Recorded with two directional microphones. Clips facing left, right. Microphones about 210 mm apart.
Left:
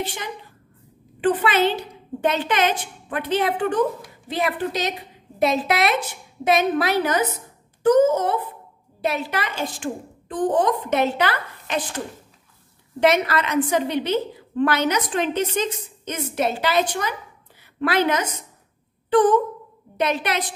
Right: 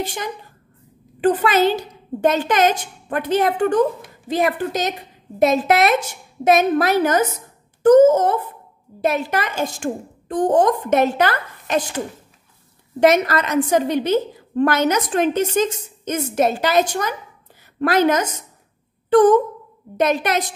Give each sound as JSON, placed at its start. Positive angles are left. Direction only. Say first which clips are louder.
{"t": 0.0, "sound": "a woman's voice", "louder": "right 3 dB", "side_deg": -45}
{"t": 13.0, "sound": "a woman's voice", "louder": "right 4 dB", "side_deg": -45}
{"t": 19.0, "sound": "a sound", "louder": "right 4 dB", "side_deg": -45}
{"t": 20.0, "sound": "a woman's voice", "louder": "right 4 dB", "side_deg": -45}